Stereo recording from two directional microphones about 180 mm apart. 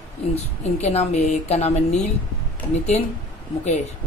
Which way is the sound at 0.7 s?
35° left (ahead or behind).